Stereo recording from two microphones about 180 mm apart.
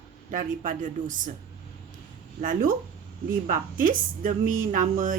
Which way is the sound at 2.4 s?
50° right (ahead or behind).